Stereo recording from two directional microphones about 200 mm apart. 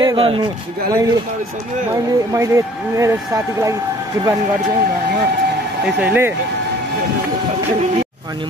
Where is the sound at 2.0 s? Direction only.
15° right (ahead or behind).